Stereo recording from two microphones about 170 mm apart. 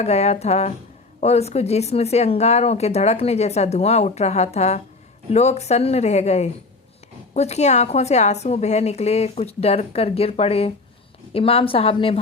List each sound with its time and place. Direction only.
0.0 s speech: 40° left (ahead or behind)